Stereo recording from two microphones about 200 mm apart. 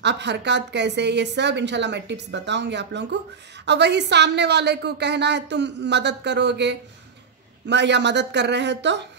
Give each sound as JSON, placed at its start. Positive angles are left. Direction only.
{"t": 0.0, "sound": "a woman's voice", "side_deg": -60}